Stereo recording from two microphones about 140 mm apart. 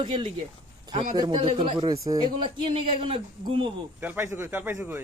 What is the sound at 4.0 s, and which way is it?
Speech, 15° right (ahead or behind).